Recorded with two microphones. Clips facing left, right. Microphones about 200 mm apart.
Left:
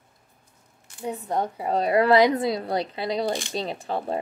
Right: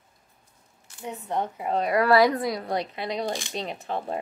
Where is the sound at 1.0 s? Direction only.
35° left (ahead or behind).